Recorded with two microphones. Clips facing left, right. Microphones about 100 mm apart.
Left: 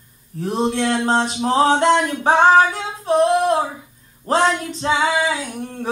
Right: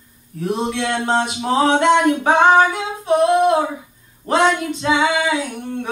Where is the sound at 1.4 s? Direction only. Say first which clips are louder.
Even; 35° left (ahead or behind).